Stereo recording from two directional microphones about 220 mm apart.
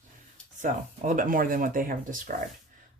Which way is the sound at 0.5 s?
35° right (ahead or behind).